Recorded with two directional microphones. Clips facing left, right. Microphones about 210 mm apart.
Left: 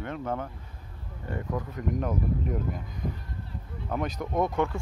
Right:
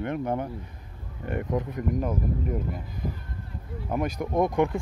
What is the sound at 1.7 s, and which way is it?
Speech, centre (ahead or behind).